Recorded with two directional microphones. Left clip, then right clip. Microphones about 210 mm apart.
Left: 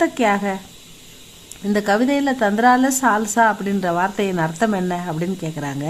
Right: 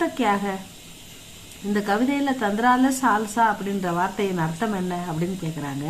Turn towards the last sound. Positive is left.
turn(degrees=40)  # may be behind; listen again after turning